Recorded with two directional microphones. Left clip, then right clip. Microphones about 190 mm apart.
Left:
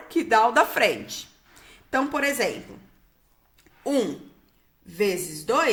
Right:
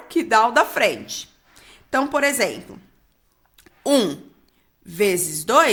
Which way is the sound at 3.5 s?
40° right (ahead or behind).